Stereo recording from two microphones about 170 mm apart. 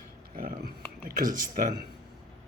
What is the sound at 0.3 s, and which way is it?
Speech, 55° right (ahead or behind).